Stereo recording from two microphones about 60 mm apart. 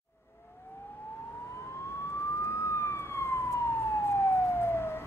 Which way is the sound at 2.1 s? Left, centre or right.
Left.